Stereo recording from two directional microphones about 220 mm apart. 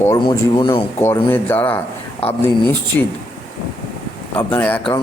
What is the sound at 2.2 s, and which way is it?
Speech, 25° left (ahead or behind).